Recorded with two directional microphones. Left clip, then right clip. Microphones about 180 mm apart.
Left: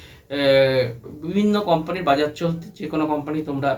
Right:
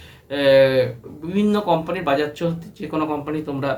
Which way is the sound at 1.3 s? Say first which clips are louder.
Even; 15° right (ahead or behind).